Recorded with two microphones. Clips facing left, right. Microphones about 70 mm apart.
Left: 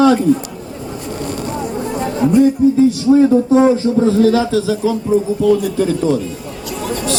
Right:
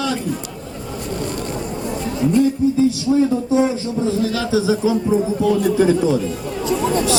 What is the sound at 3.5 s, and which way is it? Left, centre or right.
Speech, left.